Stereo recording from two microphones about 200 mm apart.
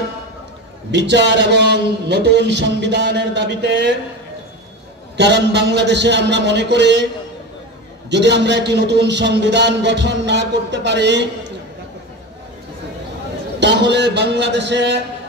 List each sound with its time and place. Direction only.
0.9 s a man's voice: 60° right (ahead or behind)
5.1 s a man's voice: 60° right (ahead or behind)
8.1 s a man's voice: 60° right (ahead or behind)
13.6 s a man's voice: 60° right (ahead or behind)